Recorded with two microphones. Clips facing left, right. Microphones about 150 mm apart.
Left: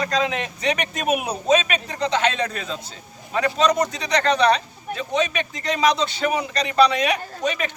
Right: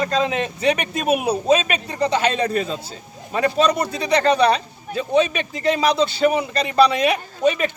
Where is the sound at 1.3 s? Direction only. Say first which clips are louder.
Right 2 dB; 30° right (ahead or behind).